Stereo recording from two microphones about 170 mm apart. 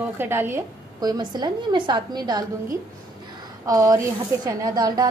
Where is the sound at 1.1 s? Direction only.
25° right (ahead or behind).